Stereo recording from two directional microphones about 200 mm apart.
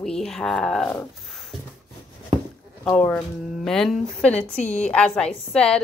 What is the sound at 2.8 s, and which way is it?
A woman's voice, 5° left (ahead or behind).